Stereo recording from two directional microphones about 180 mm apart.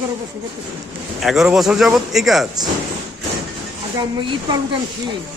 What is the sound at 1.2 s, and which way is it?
Speech, centre (ahead or behind).